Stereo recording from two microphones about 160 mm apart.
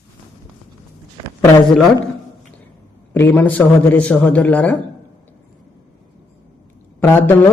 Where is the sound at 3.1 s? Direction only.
10° left (ahead or behind).